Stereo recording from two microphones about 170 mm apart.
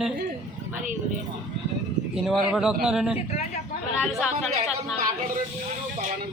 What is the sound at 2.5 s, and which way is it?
Speech, 5° right (ahead or behind).